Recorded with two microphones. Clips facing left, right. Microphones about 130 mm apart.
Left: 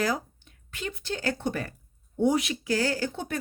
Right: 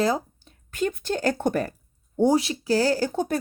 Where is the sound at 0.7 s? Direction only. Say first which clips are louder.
Right 8 dB; 45° right (ahead or behind).